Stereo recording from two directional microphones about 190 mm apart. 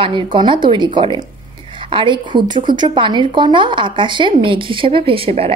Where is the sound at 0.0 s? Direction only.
25° right (ahead or behind).